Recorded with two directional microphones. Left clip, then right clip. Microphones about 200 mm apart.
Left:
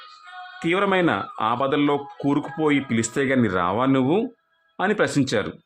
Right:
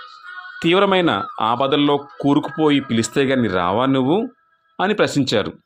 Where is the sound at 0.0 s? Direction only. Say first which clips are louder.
Right 5 dB; 50° right (ahead or behind).